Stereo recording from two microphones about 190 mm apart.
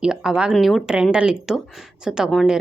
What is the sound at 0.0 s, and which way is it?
A woman's voice, 5° right (ahead or behind).